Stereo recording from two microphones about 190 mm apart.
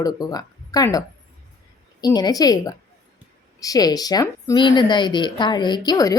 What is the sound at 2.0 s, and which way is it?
Speech, 20° left (ahead or behind).